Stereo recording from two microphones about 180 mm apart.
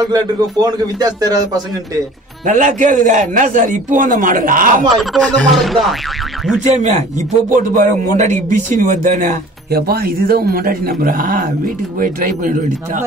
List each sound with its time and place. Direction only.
0.0 s speech: 20° right (ahead or behind)
2.4 s a man's voice: 45° right (ahead or behind)
4.8 s speech: 5° left (ahead or behind)
6.6 s a man's voice: 40° right (ahead or behind)